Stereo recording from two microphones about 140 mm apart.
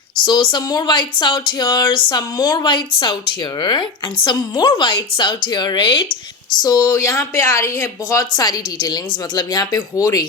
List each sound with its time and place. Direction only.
0.3 s a woman's voice: 30° left (ahead or behind)